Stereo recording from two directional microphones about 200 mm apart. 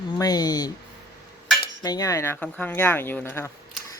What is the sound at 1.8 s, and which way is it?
Speech, 20° left (ahead or behind).